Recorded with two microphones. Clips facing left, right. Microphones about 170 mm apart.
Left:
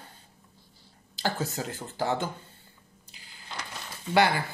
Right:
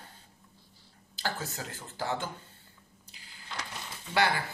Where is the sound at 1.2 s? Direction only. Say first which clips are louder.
Left 6 dB; 20° left (ahead or behind).